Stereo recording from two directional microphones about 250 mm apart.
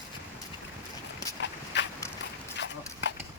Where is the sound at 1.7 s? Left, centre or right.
Left.